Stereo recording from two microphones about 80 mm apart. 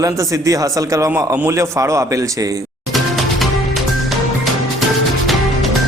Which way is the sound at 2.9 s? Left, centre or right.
Centre.